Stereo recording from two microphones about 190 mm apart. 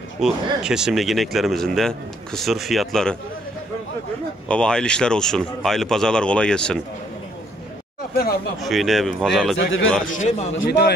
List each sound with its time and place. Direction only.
0.2 s speech: 5° right (ahead or behind)
4.5 s speech: 5° left (ahead or behind)
8.1 s speech: 55° left (ahead or behind)
8.5 s speech: centre (ahead or behind)
9.6 s a man's voice: 90° left
10.0 s a man's voice: 40° left (ahead or behind)
10.5 s a man's voice: 75° left (ahead or behind)